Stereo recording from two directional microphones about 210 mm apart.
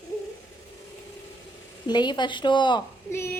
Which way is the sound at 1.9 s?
20° left (ahead or behind).